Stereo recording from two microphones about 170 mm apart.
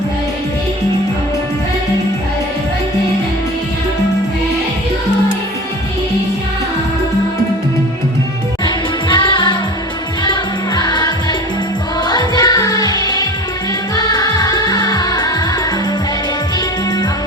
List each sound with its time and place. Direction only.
8.6 s music: 25° left (ahead or behind)
10.8 s music: 25° left (ahead or behind)